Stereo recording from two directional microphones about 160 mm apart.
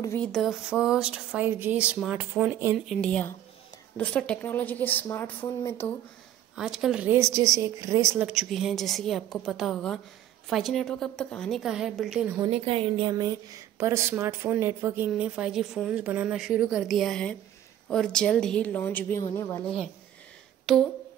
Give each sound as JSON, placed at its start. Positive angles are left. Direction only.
{"t": 0.0, "sound": "speech", "side_deg": 15}
{"t": 0.3, "sound": "speech", "side_deg": 0}
{"t": 2.9, "sound": "speech", "side_deg": 5}
{"t": 6.5, "sound": "speech", "side_deg": 0}
{"t": 8.3, "sound": "speech", "side_deg": 0}
{"t": 12.4, "sound": "a woman's voice", "side_deg": -35}
{"t": 15.0, "sound": "speech", "side_deg": -5}
{"t": 20.7, "sound": "speech", "side_deg": 0}